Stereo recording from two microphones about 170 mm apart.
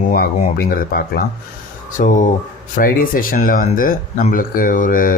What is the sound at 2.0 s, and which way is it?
Speech, 50° left (ahead or behind).